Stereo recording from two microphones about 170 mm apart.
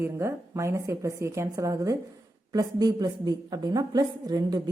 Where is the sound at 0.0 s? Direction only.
15° right (ahead or behind).